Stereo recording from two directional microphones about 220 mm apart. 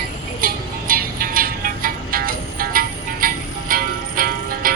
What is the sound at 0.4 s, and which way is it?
Music, 40° right (ahead or behind).